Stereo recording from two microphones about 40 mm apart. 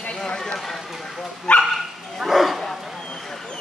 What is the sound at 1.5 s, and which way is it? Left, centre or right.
Dog, left.